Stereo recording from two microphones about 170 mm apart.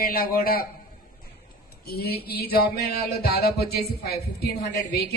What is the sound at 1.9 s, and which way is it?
A woman's voice, 65° left (ahead or behind).